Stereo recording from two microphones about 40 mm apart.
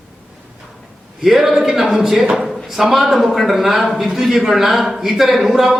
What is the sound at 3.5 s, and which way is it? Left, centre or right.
A man's voice, centre.